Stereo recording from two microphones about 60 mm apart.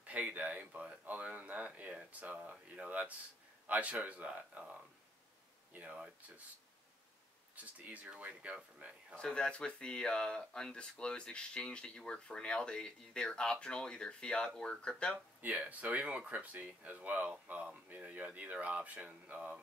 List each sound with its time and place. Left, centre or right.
0.0 s speech: right
5.7 s speech: right
7.5 s speech: right
9.1 s speech: centre
15.4 s speech: right